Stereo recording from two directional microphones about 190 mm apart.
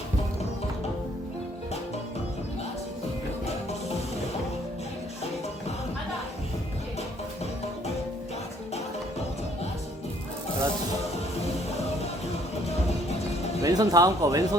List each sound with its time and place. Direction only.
3.4 s music: 35° left (ahead or behind)
13.6 s speech: 20° right (ahead or behind)